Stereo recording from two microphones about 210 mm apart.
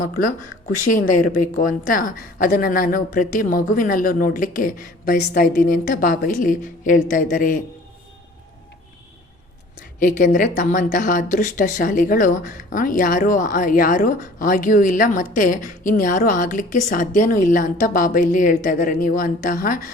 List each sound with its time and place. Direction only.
0.9 s speech: 40° left (ahead or behind)
10.0 s speech: 40° left (ahead or behind)